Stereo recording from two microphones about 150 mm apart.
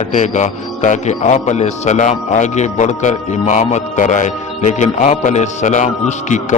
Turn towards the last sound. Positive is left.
turn(degrees=55)  # may be behind; listen again after turning